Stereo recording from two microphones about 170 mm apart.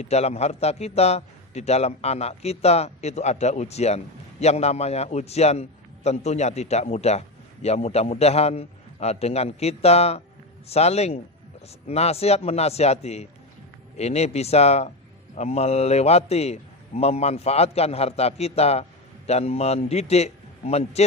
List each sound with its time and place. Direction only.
0.0 s a man's voice: 40° left (ahead or behind)